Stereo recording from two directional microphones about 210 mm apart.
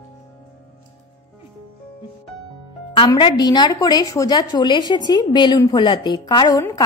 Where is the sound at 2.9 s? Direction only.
20° left (ahead or behind).